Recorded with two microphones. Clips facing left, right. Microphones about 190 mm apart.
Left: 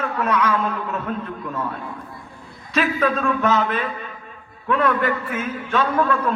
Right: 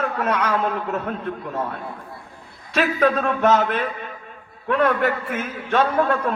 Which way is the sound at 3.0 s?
45° right (ahead or behind).